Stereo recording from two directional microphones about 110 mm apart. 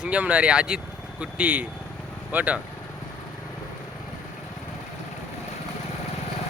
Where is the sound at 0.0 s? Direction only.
10° right (ahead or behind).